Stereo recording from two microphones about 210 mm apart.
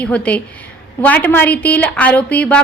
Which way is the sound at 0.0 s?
5° left (ahead or behind).